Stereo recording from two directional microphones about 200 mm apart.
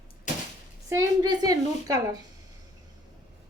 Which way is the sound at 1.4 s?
20° right (ahead or behind).